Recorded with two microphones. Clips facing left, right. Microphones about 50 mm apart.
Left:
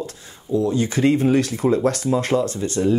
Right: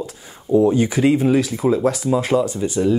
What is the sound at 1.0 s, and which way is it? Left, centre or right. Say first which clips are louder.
Speech: left 2 dB; centre.